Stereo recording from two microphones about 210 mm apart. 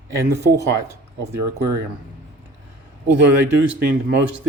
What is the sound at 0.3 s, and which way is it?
Speech, 15° right (ahead or behind).